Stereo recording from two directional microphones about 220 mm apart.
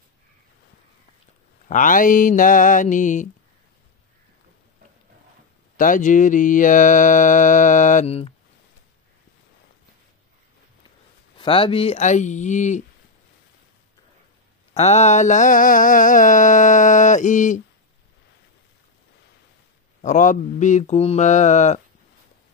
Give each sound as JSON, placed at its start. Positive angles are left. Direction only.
{"t": 1.7, "sound": "mantra", "side_deg": 35}
{"t": 5.8, "sound": "mantra", "side_deg": 35}
{"t": 11.3, "sound": "mantra", "side_deg": 25}
{"t": 14.7, "sound": "mantra", "side_deg": 30}
{"t": 20.0, "sound": "mantra", "side_deg": 35}